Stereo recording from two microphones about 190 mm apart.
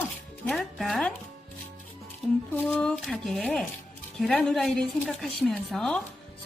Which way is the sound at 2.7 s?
5° left (ahead or behind).